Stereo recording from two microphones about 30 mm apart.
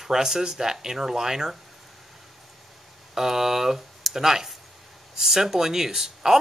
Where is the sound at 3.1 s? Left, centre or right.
Centre.